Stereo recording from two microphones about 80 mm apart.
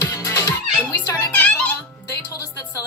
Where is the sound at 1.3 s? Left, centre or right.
Centre.